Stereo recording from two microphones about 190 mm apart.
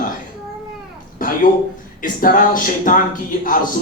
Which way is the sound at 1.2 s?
45° left (ahead or behind).